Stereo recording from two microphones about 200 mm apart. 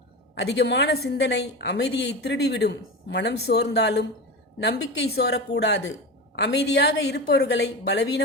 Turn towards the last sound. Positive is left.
turn(degrees=55)  # may be behind; listen again after turning